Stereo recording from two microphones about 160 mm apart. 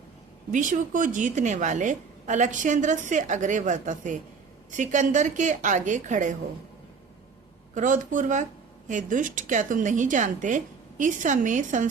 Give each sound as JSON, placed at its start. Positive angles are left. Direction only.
{"t": 0.5, "sound": "a woman's voice", "side_deg": -55}
{"t": 7.7, "sound": "a woman's voice", "side_deg": -50}